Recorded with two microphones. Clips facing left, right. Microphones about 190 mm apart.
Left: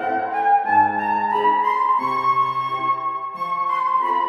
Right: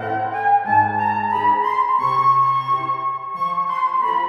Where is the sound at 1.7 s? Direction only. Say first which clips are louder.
Right 1 dB; 15° left (ahead or behind).